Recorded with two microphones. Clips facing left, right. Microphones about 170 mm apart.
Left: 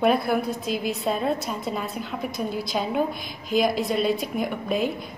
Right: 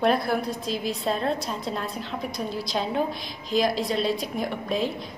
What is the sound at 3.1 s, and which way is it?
Speech, 55° left (ahead or behind).